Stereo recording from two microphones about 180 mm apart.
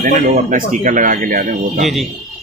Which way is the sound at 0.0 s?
45° right (ahead or behind).